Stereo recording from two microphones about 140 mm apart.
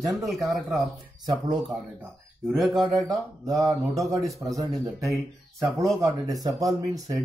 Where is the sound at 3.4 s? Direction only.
25° right (ahead or behind).